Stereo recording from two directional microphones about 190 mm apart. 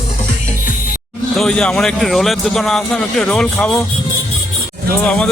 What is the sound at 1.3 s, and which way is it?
Speech, centre (ahead or behind).